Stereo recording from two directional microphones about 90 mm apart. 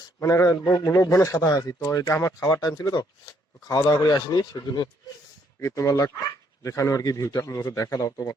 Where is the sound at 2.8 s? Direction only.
50° left (ahead or behind).